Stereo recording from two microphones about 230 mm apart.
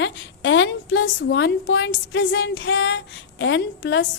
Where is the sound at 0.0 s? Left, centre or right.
Left.